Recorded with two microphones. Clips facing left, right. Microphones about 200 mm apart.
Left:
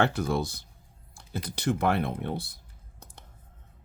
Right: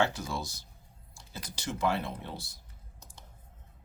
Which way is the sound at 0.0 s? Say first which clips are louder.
Left 5 dB; 60° left (ahead or behind).